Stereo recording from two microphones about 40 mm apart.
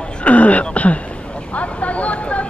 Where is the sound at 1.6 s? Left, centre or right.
Left.